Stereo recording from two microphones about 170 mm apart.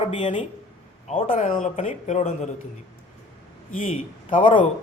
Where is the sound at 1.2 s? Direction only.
50° left (ahead or behind).